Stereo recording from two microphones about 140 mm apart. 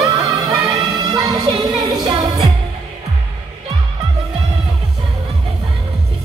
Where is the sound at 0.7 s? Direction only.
30° right (ahead or behind).